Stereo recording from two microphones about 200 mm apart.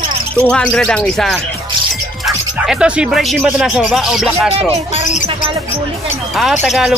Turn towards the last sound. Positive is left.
turn(degrees=0)  # may be behind; listen again after turning